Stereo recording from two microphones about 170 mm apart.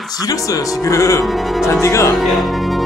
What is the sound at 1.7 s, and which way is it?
Speech, 15° left (ahead or behind).